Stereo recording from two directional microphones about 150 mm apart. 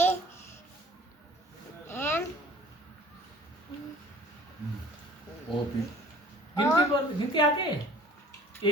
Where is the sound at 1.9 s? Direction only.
15° left (ahead or behind).